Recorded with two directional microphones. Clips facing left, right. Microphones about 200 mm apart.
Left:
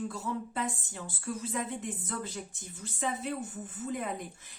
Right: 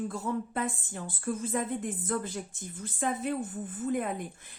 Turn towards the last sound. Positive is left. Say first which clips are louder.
# right 5 dB
turn(degrees=-50)  # may be behind; listen again after turning